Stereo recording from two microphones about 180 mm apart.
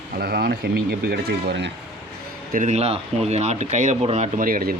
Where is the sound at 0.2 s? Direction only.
60° right (ahead or behind).